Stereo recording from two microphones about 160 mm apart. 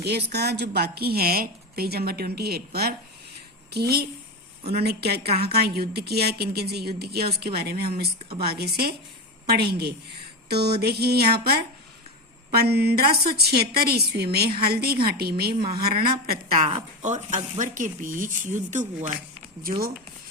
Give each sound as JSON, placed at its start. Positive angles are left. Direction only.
{"t": 0.0, "sound": "a woman's voice", "side_deg": -90}
{"t": 16.6, "sound": "speech", "side_deg": -45}